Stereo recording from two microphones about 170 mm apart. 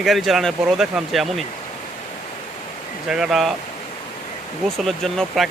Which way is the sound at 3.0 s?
5° right (ahead or behind).